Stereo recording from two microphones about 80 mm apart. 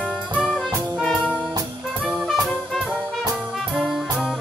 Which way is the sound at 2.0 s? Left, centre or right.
Centre.